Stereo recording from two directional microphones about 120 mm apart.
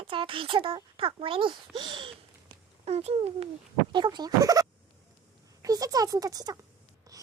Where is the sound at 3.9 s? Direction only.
35° right (ahead or behind).